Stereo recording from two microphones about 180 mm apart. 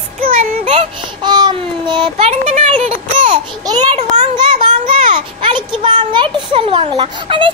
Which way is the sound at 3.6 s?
20° right (ahead or behind).